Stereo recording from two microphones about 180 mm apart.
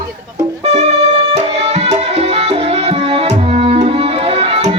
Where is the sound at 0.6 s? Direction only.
35° right (ahead or behind).